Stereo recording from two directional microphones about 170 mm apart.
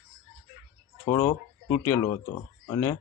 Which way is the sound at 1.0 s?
15° left (ahead or behind).